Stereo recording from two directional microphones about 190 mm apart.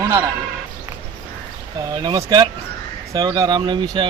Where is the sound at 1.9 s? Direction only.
20° right (ahead or behind).